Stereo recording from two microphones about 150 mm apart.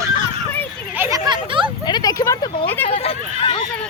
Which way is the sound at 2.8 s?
40° left (ahead or behind).